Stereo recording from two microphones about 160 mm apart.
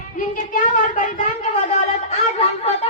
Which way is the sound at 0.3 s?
55° left (ahead or behind).